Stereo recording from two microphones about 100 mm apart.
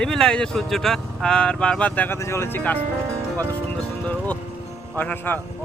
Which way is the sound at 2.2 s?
25° left (ahead or behind).